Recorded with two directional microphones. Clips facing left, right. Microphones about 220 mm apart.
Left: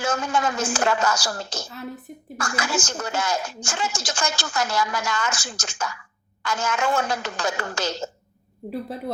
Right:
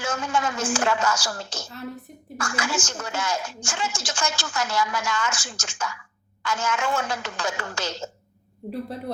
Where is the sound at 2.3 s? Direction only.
40° left (ahead or behind).